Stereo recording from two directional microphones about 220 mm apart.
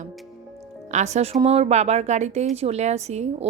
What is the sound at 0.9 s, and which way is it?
A woman's voice, 30° right (ahead or behind).